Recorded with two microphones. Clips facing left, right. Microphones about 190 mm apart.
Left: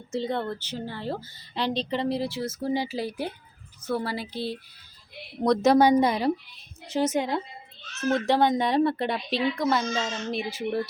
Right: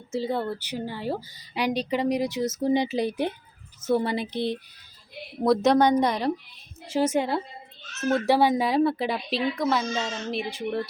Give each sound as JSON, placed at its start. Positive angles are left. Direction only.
{"t": 0.1, "sound": "a woman's voice", "side_deg": -5}
{"t": 5.4, "sound": "a woman's voice", "side_deg": 0}
{"t": 6.9, "sound": "a woman's voice", "side_deg": -10}